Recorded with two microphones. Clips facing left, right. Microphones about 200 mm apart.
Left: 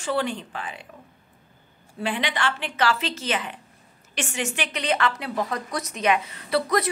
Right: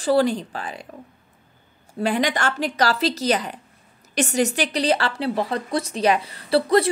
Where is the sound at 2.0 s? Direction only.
40° right (ahead or behind).